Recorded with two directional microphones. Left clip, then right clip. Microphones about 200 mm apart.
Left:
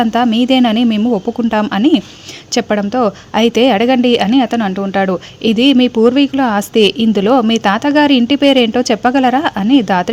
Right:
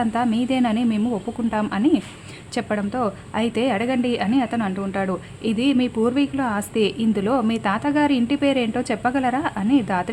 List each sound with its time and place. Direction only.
0.0 s a woman's voice: 35° left (ahead or behind)